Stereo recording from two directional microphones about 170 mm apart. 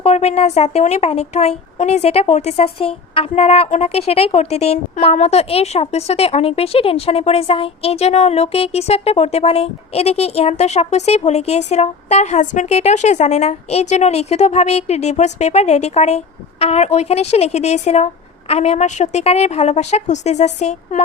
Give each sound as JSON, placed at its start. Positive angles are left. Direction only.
{"t": 0.0, "sound": "speech", "side_deg": 40}